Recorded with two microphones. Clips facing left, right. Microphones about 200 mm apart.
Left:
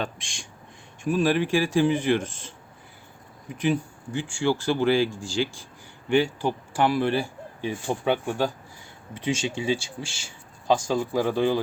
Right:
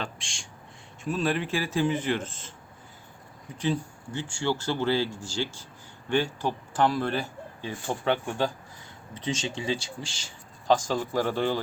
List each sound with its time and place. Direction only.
0.0 s speech: 15° left (ahead or behind)
3.5 s speech: 10° left (ahead or behind)